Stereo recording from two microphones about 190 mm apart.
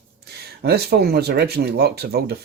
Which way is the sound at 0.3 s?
60° right (ahead or behind).